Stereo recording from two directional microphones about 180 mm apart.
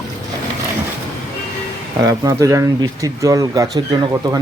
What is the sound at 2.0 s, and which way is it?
Speech, 15° right (ahead or behind).